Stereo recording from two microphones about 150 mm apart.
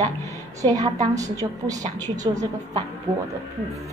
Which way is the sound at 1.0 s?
25° right (ahead or behind).